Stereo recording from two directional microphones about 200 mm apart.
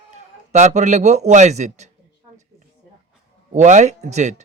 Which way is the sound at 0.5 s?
35° right (ahead or behind).